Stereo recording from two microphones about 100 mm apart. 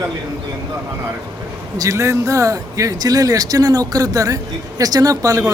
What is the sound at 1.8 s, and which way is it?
Speech, 30° right (ahead or behind).